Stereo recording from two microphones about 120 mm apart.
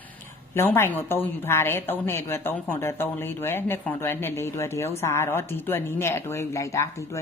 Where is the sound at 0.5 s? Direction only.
20° left (ahead or behind).